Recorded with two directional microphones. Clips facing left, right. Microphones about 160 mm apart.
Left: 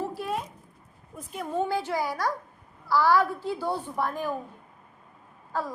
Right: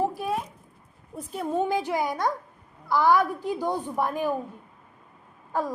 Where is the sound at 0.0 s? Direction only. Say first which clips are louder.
Right 5 dB; 15° right (ahead or behind).